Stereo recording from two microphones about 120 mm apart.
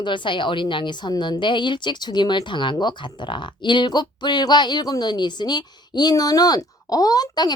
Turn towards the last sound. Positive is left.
turn(degrees=35)  # may be behind; listen again after turning